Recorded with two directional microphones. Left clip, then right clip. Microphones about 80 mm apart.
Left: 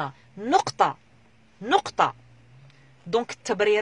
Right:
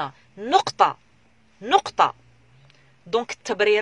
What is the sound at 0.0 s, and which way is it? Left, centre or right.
Speech, left.